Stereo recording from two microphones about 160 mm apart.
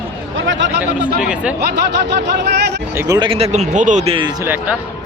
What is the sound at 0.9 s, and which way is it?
Speech, 60° left (ahead or behind).